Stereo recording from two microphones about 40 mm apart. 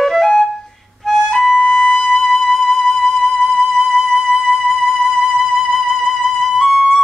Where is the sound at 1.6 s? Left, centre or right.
Centre.